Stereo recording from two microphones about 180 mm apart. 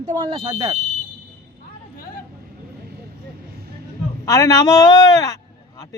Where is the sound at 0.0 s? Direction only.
30° right (ahead or behind).